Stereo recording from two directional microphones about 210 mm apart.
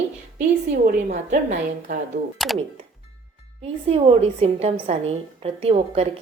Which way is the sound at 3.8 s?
30° right (ahead or behind).